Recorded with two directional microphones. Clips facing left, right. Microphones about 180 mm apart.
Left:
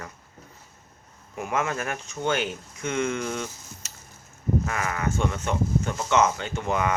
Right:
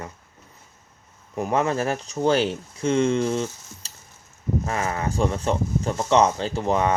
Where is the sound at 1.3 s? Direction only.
35° right (ahead or behind).